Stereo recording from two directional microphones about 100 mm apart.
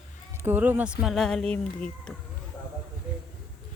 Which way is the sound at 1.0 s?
5° left (ahead or behind).